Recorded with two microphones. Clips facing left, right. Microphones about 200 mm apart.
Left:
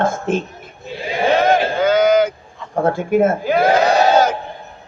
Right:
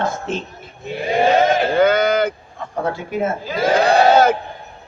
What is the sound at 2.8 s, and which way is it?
Speech, 50° left (ahead or behind).